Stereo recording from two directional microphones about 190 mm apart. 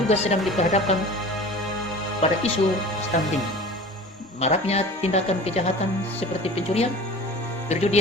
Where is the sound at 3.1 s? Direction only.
40° left (ahead or behind).